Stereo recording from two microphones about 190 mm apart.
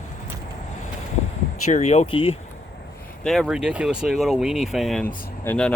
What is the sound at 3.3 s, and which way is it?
Speech, centre (ahead or behind).